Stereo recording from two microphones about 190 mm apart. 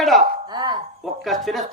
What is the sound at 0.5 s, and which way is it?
Chopping, 20° right (ahead or behind).